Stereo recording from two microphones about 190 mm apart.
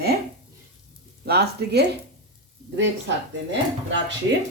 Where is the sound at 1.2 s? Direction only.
55° right (ahead or behind).